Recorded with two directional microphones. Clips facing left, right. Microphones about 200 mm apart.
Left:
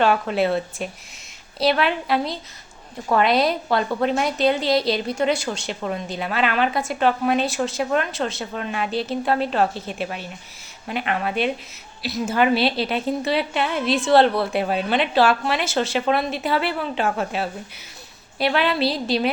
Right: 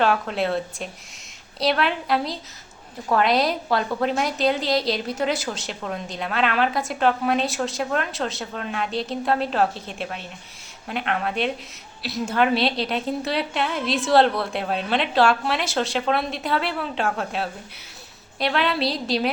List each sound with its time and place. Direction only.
0.0 s a woman's voice: centre (ahead or behind)